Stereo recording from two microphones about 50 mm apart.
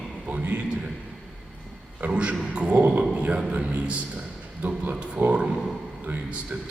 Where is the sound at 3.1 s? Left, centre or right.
Right.